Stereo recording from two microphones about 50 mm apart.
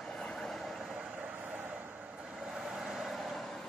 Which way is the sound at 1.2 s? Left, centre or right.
Right.